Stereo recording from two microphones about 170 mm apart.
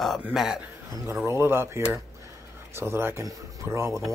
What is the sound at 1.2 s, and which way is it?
Speech, 15° right (ahead or behind).